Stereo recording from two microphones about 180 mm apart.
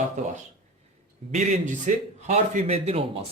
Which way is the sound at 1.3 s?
40° right (ahead or behind).